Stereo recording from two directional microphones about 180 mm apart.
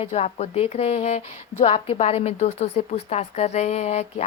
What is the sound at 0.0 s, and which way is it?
A woman's voice, 35° left (ahead or behind).